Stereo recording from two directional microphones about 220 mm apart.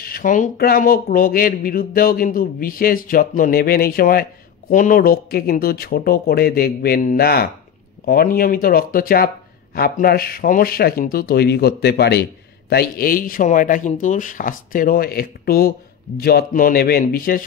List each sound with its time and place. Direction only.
0.0 s speech: 40° left (ahead or behind)